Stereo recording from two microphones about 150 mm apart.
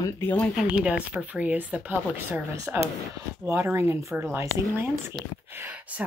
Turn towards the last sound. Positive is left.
turn(degrees=-10)  # may be behind; listen again after turning